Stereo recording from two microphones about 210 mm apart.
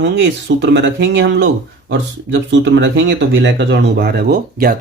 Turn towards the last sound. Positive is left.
turn(degrees=-45)  # may be behind; listen again after turning